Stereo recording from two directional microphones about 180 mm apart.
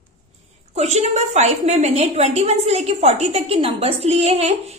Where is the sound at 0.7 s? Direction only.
40° right (ahead or behind).